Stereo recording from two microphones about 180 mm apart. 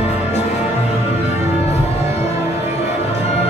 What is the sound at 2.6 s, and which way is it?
Music, 40° left (ahead or behind).